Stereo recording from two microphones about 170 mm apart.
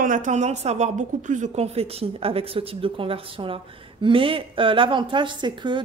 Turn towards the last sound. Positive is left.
turn(degrees=-25)  # may be behind; listen again after turning